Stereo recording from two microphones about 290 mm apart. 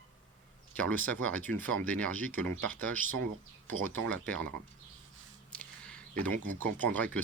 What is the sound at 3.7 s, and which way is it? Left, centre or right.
Speech, right.